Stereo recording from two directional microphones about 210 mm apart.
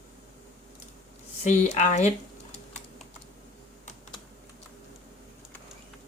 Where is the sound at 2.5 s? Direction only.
35° left (ahead or behind).